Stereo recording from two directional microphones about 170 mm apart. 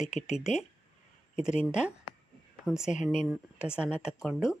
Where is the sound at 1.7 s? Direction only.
5° right (ahead or behind).